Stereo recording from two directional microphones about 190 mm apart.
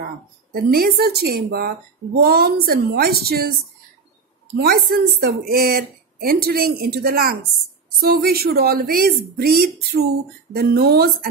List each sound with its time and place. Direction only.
0.5 s a woman's voice: 50° right (ahead or behind)
4.6 s speech: 55° right (ahead or behind)